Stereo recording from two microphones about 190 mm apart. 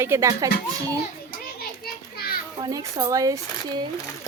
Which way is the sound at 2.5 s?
20° right (ahead or behind).